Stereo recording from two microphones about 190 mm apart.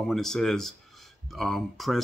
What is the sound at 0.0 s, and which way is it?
Speech, centre (ahead or behind).